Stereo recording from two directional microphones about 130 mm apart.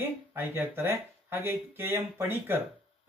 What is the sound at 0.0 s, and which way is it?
Speech, 15° right (ahead or behind).